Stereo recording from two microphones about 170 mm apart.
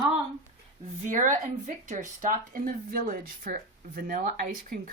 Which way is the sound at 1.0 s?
50° right (ahead or behind).